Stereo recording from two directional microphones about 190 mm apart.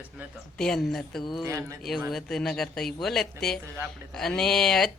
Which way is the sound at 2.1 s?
5° left (ahead or behind).